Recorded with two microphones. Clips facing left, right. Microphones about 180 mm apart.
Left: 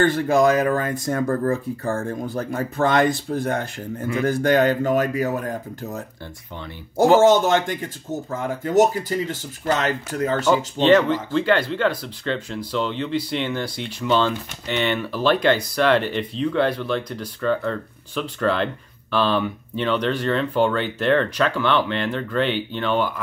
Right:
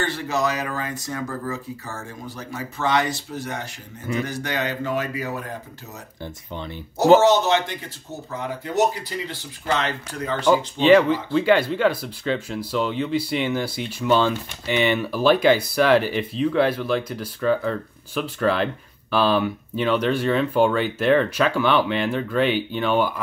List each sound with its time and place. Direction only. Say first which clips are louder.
0.0 s speech: left 7 dB; 50° left (ahead or behind)
7.2 s speech: left 2 dB; 50° left (ahead or behind)
10.5 s speech: right 2 dB; 10° right (ahead or behind)